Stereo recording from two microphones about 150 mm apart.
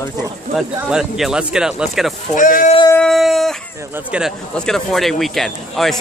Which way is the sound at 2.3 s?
60° left (ahead or behind).